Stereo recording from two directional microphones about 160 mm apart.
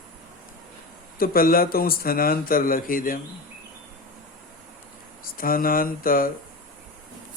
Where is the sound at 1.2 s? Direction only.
65° left (ahead or behind).